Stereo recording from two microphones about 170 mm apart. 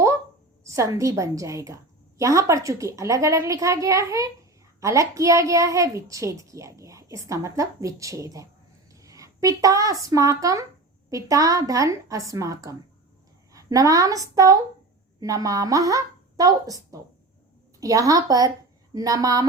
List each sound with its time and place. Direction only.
0.6 s a child's voice: 15° right (ahead or behind)
17.7 s a child's voice: 20° right (ahead or behind)